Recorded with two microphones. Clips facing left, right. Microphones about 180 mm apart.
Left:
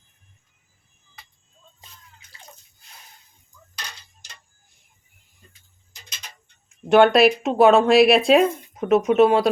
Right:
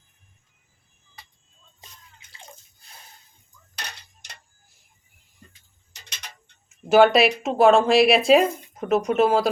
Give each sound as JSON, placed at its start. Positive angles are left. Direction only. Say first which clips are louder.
{"t": 3.8, "sound": "tick-tock", "louder": "right 1 dB", "side_deg": -65}
{"t": 6.8, "sound": "speech", "louder": "left 2 dB", "side_deg": 0}